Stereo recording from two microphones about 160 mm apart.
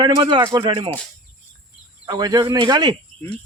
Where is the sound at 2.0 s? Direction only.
25° right (ahead or behind).